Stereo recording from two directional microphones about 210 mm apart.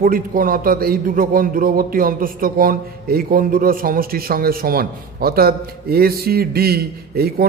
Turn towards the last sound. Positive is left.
turn(degrees=-45)  # may be behind; listen again after turning